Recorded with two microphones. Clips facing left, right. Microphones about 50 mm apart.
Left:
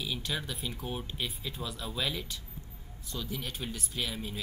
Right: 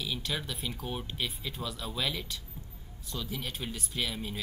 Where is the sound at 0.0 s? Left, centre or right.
Centre.